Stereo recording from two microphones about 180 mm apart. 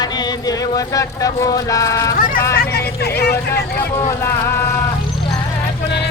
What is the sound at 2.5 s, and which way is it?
Speech, 60° left (ahead or behind).